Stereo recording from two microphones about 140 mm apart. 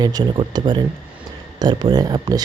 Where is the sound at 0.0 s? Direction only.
30° right (ahead or behind).